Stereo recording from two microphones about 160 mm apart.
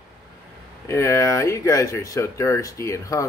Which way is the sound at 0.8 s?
15° left (ahead or behind).